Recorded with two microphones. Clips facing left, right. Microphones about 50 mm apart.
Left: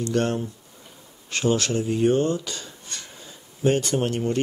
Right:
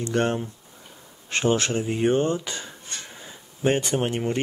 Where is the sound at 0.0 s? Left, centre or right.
Right.